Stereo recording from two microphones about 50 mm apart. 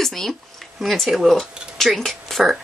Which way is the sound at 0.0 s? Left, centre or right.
Centre.